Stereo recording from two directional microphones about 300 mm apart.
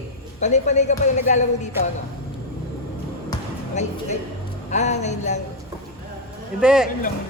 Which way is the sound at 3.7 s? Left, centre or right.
Left.